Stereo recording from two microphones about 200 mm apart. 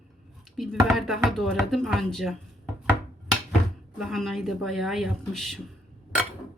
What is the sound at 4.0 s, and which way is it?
Speech, centre (ahead or behind).